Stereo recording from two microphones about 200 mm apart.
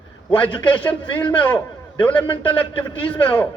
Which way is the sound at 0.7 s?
10° left (ahead or behind).